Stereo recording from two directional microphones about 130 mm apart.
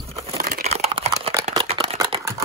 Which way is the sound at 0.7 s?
55° right (ahead or behind).